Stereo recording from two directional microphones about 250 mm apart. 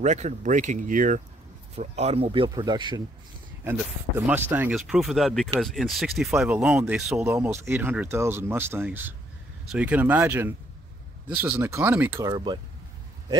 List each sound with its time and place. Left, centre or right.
0.0 s speech: right
4.3 s speech: centre